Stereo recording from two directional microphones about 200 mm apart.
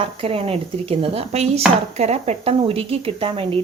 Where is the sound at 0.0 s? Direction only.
30° right (ahead or behind).